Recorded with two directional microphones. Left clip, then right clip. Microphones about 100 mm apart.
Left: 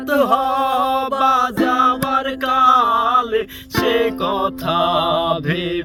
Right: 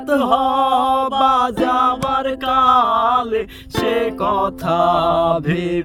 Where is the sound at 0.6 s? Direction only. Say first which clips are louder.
Right 2 dB; 55° right (ahead or behind).